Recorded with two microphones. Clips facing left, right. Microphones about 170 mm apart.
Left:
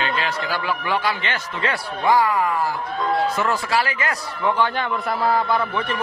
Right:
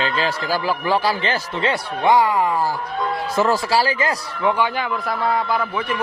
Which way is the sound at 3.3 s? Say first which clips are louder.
Right 4 dB; 35° right (ahead or behind).